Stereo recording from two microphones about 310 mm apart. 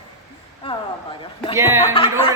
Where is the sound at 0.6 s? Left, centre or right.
Centre.